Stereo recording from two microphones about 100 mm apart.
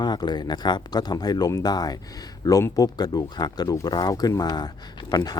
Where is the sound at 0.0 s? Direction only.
45° left (ahead or behind).